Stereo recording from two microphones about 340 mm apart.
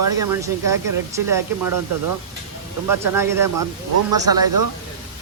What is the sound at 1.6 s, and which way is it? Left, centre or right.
Speech, right.